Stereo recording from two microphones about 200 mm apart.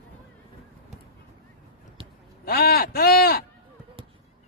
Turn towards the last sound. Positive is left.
turn(degrees=50)  # may be behind; listen again after turning